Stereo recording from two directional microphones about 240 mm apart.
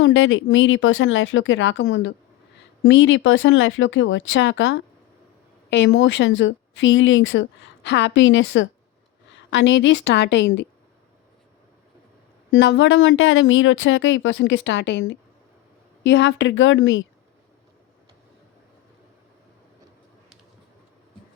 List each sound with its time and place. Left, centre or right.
0.0 s speech: left
12.5 s speech: left